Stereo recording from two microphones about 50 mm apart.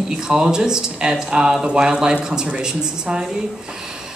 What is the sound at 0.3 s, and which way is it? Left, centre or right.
Speech, centre.